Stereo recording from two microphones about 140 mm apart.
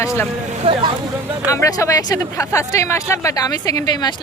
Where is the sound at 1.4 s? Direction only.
25° left (ahead or behind).